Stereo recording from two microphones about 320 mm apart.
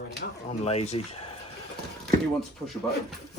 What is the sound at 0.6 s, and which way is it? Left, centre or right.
Speech, centre.